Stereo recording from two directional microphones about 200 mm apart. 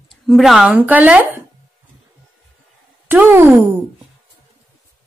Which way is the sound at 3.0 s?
10° right (ahead or behind).